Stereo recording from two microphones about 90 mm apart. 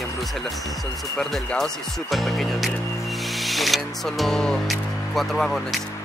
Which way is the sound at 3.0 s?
Centre (ahead or behind).